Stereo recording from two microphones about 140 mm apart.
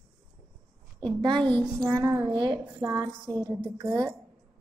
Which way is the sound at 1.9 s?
20° right (ahead or behind).